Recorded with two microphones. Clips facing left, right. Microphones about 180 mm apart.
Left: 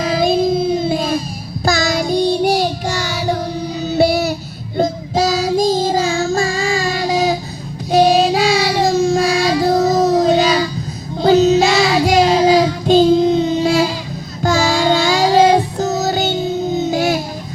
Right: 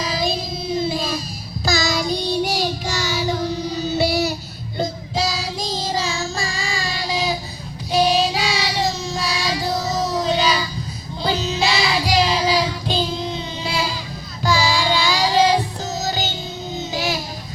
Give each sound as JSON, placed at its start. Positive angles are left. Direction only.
{"t": 0.0, "sound": "child singing", "side_deg": 55}
{"t": 3.9, "sound": "music", "side_deg": 55}
{"t": 4.8, "sound": "child singing", "side_deg": 45}
{"t": 14.4, "sound": "music", "side_deg": 45}